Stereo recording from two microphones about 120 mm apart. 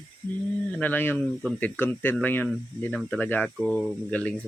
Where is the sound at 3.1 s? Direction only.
15° left (ahead or behind).